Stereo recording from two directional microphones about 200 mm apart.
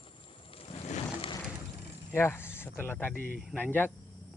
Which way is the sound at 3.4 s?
Centre (ahead or behind).